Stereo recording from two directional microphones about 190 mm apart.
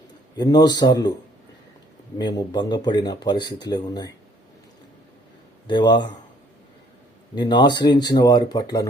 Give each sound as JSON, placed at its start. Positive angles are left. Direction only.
{"t": 0.3, "sound": "speech", "side_deg": 20}
{"t": 2.1, "sound": "speech", "side_deg": 20}
{"t": 5.6, "sound": "speech", "side_deg": 25}
{"t": 7.3, "sound": "speech", "side_deg": 25}